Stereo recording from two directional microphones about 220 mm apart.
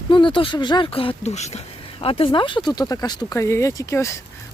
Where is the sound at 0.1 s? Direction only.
20° left (ahead or behind).